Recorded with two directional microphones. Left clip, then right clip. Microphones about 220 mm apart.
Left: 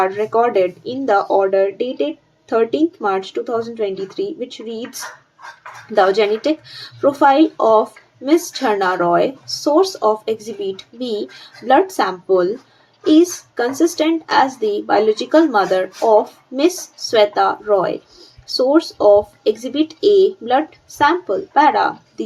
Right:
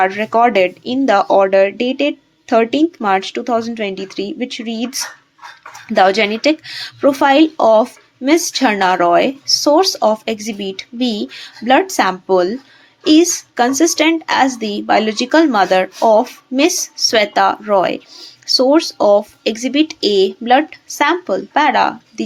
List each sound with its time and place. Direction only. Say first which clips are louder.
0.0 s speech: right 3 dB; 25° right (ahead or behind)